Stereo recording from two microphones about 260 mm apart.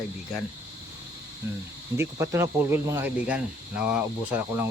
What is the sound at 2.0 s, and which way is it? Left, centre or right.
Speech, centre.